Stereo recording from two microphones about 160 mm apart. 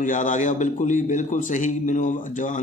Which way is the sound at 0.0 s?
55° left (ahead or behind).